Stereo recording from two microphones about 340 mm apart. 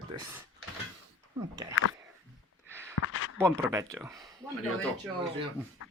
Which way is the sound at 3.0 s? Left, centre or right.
Left.